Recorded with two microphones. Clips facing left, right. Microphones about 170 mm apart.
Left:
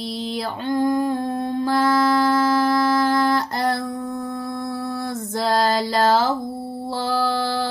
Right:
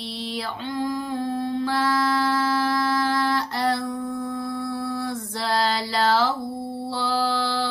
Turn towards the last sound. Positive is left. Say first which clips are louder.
# left 2 dB
turn(degrees=45)  # may be behind; listen again after turning